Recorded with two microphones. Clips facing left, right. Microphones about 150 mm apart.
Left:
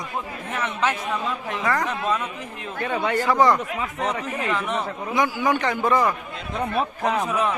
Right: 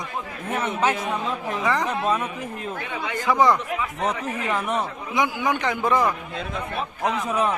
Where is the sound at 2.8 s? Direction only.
45° left (ahead or behind).